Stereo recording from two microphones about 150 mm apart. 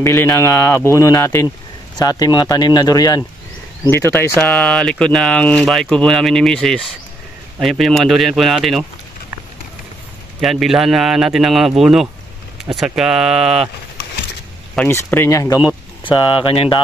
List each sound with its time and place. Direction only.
0.0 s speech: 15° left (ahead or behind); by 8.8 s centre (ahead or behind)
10.4 s speech: centre (ahead or behind)
14.9 s speech: 15° left (ahead or behind); by 16.8 s 35° left (ahead or behind)